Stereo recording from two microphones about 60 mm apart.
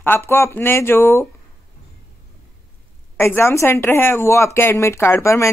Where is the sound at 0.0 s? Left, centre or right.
Left.